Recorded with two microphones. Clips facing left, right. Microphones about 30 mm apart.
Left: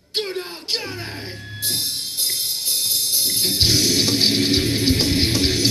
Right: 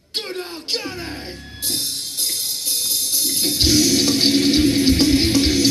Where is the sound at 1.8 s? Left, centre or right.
Left.